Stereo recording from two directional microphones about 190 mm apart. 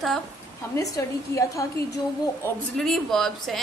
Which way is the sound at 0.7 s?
15° left (ahead or behind).